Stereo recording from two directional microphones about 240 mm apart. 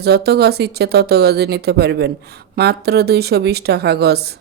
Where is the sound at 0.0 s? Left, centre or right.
Right.